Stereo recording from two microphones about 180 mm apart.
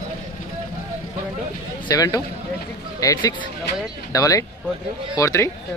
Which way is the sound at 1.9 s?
20° left (ahead or behind).